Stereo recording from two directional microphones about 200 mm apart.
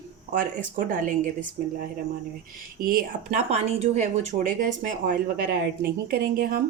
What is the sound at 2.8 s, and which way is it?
Speech, 40° right (ahead or behind).